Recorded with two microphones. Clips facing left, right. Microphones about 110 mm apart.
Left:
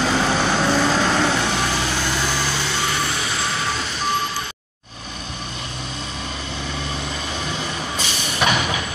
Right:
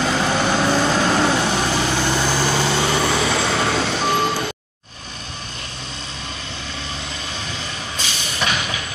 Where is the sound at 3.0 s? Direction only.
70° right (ahead or behind).